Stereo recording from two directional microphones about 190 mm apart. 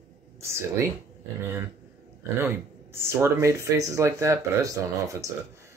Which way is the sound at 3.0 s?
15° right (ahead or behind).